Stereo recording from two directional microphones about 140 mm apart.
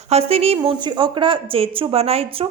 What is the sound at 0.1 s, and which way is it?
A woman's voice, 45° right (ahead or behind).